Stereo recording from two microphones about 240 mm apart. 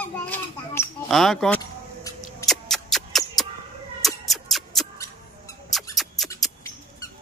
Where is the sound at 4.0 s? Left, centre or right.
Centre.